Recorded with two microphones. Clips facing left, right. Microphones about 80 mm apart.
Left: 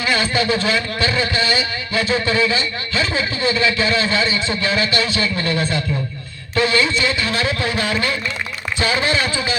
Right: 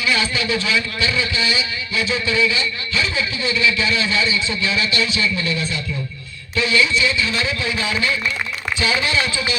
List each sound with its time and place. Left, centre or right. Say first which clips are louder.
0.0 s a man's voice: left 2 dB; left
8.8 s a man's voice: left 2 dB; left